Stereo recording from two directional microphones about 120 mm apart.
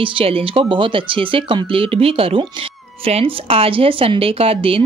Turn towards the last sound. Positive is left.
turn(degrees=-50)  # may be behind; listen again after turning